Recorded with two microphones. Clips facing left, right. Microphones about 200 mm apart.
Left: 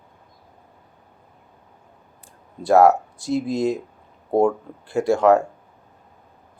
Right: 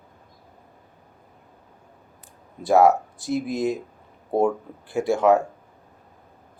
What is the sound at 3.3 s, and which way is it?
Speech, 25° left (ahead or behind).